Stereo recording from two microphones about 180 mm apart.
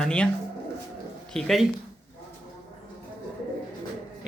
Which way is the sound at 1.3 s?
Centre (ahead or behind).